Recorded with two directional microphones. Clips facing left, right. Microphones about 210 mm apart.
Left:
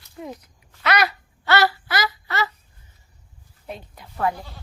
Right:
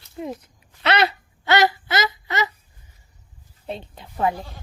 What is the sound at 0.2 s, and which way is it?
Speech, 20° right (ahead or behind).